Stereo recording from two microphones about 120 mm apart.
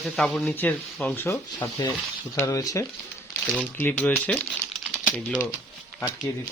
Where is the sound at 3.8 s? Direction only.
15° left (ahead or behind).